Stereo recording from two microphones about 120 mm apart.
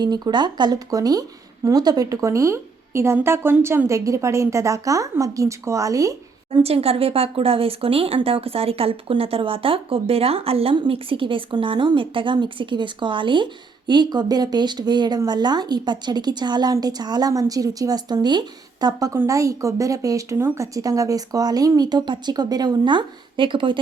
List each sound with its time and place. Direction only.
0.0 s speech: 35° right (ahead or behind)
6.6 s speech: 55° right (ahead or behind)